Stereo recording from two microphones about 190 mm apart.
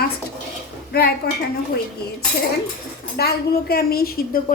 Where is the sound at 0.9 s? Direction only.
55° left (ahead or behind).